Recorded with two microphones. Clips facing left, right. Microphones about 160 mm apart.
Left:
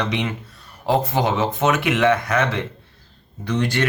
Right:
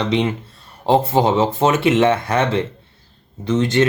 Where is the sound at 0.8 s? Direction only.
25° right (ahead or behind).